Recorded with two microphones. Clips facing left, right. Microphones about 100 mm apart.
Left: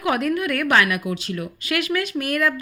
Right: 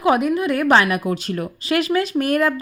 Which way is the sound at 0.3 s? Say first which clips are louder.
Right 3 dB; 30° right (ahead or behind).